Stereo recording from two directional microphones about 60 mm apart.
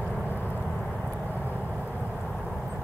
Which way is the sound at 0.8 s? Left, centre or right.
Centre.